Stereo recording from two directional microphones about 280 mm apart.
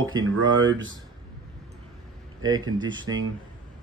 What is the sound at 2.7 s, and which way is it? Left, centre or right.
Speech, centre.